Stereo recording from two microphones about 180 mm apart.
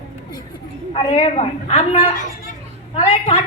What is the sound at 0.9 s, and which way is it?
Speech, 30° left (ahead or behind).